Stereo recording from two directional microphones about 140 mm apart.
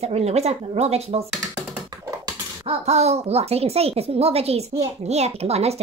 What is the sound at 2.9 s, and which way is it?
A woman's voice, 50° right (ahead or behind).